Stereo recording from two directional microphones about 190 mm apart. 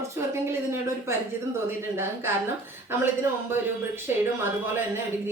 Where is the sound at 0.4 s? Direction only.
15° right (ahead or behind).